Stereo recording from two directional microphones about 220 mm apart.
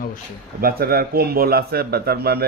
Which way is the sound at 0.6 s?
45° right (ahead or behind).